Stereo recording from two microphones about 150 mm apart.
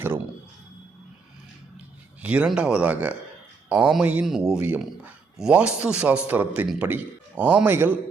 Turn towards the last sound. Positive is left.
turn(degrees=-15)  # may be behind; listen again after turning